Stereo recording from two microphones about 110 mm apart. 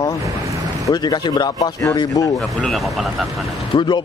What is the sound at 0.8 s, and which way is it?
Speech, 40° left (ahead or behind).